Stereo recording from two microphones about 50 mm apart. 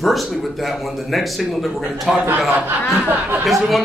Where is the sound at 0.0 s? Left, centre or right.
Centre.